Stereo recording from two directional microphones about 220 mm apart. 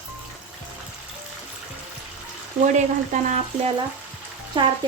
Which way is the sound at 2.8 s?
30° right (ahead or behind).